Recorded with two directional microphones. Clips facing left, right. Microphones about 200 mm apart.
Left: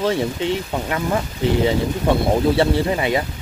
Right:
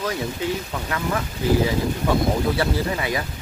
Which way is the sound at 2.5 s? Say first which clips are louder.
Left 5 dB; 25° left (ahead or behind).